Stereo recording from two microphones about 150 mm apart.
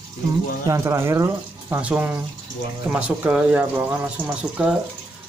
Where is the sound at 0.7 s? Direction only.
20° right (ahead or behind).